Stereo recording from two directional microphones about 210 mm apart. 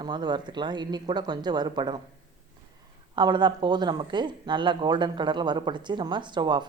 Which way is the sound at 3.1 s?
20° right (ahead or behind).